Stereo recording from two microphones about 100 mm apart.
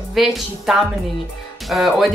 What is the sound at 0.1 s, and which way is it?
Speech, centre (ahead or behind).